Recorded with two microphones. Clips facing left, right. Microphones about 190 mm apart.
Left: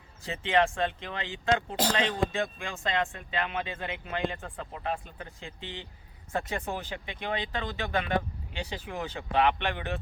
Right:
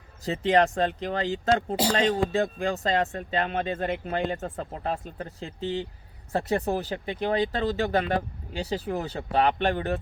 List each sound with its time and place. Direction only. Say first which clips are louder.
0.3 s speech: right 4 dB; 40° right (ahead or behind)